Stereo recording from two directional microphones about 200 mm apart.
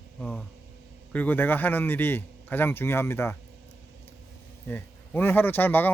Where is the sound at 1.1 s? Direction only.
10° left (ahead or behind).